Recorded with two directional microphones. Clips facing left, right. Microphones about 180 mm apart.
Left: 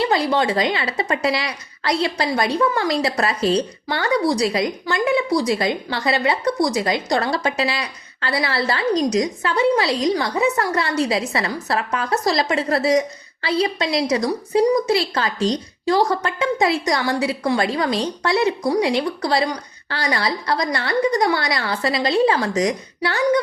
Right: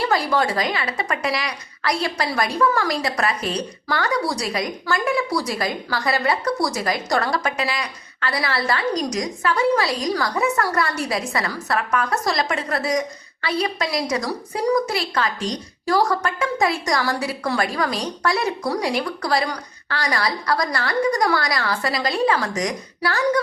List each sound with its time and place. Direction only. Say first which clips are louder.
0.0 s speech: left 2 dB; 25° left (ahead or behind)